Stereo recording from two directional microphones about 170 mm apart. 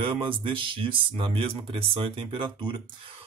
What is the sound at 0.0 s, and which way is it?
Speech, 30° right (ahead or behind).